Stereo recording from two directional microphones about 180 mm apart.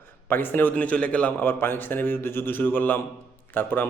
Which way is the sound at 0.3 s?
10° left (ahead or behind).